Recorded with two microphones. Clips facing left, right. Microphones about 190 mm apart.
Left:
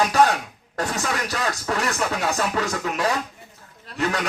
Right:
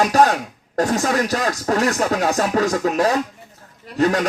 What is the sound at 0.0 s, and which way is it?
Speech, 40° right (ahead or behind).